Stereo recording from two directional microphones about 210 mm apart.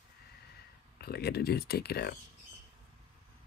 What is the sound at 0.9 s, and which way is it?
Speech, 50° left (ahead or behind).